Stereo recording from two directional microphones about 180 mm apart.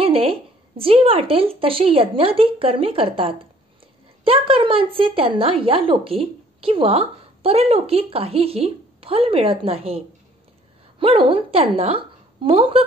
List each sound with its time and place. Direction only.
0.0 s speech: 30° right (ahead or behind)